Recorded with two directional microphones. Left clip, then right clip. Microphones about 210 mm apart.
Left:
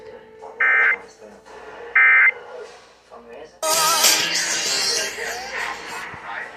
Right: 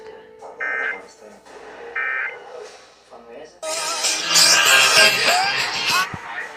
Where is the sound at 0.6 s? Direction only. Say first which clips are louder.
Left 8 dB; 25° left (ahead or behind).